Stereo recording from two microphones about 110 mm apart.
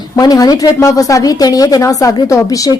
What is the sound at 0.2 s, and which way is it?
A woman's voice, 35° left (ahead or behind).